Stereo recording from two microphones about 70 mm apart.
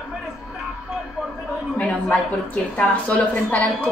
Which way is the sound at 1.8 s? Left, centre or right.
Centre.